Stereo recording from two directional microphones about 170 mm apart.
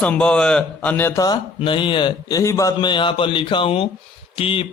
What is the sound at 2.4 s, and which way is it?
A man's voice, 15° left (ahead or behind).